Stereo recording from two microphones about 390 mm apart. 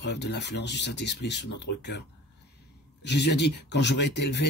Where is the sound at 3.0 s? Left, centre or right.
Left.